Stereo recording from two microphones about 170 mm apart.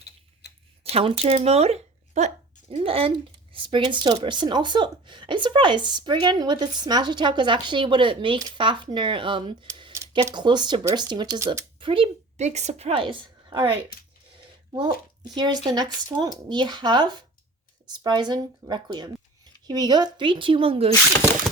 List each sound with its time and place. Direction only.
0.9 s speech: 35° right (ahead or behind)
9.9 s a sound: 15° right (ahead or behind)
10.3 s speech: 25° right (ahead or behind)
11.8 s a woman's voice: 30° right (ahead or behind)
15.4 s speech: 25° right (ahead or behind)